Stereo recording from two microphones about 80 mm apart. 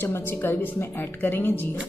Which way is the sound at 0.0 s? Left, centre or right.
Left.